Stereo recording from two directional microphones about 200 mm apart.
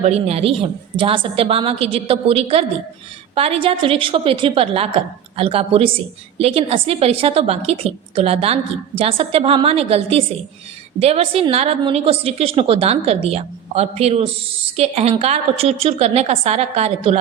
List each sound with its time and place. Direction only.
0.0 s a woman's voice: 30° right (ahead or behind)